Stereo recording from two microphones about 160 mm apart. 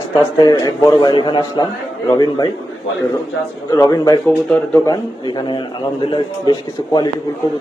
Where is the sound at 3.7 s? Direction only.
20° left (ahead or behind).